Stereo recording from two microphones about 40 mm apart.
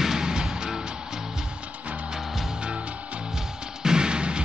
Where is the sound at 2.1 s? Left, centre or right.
Centre.